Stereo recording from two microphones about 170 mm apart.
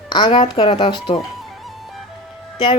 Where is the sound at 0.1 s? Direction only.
30° left (ahead or behind).